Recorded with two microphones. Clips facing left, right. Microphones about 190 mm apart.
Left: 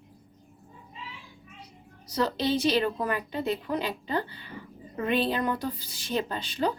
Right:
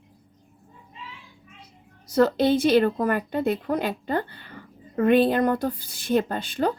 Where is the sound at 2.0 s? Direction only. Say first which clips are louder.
Right 8 dB; 50° right (ahead or behind).